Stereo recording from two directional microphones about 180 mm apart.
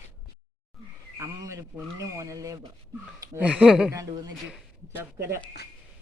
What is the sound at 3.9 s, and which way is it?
Speech, 20° right (ahead or behind).